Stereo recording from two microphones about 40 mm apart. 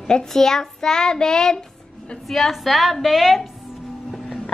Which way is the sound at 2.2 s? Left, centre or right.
Centre.